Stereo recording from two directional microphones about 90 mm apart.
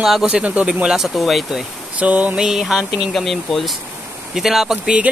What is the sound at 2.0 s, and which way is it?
A man's voice, 15° right (ahead or behind).